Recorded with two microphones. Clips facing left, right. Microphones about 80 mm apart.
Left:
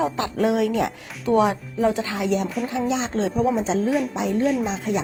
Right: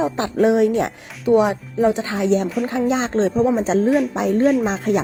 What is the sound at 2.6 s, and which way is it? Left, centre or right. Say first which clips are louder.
Speech: right 4 dB; right.